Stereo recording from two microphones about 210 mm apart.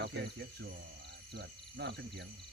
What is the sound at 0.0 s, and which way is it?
Speech, 55° right (ahead or behind).